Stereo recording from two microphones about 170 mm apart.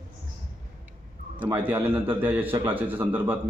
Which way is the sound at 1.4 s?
10° right (ahead or behind).